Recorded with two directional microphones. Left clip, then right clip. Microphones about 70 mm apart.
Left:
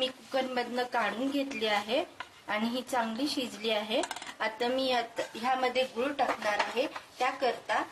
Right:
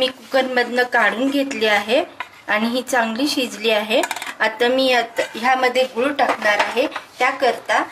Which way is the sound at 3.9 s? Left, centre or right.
Centre.